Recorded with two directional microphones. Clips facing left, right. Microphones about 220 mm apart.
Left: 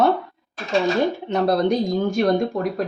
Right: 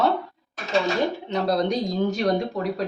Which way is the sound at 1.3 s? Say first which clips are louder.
Left 5 dB; 55° left (ahead or behind).